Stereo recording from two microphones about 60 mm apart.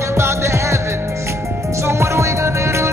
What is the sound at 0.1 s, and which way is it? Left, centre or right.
Music, right.